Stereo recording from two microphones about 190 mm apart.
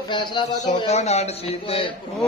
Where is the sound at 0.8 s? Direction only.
35° left (ahead or behind).